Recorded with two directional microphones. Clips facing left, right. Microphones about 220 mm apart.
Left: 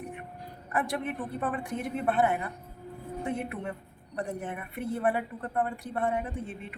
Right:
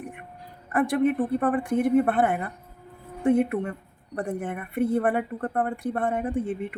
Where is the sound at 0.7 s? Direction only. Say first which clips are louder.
Right 9 dB; 55° right (ahead or behind).